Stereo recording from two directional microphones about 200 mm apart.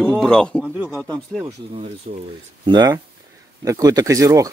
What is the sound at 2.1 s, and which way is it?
Speech, 40° right (ahead or behind).